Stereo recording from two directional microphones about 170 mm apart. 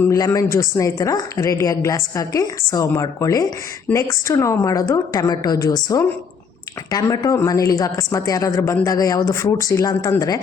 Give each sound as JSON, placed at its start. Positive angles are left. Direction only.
{"t": 0.0, "sound": "speech", "side_deg": 15}